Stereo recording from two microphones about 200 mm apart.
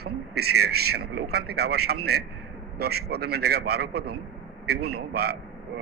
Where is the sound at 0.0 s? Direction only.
50° right (ahead or behind).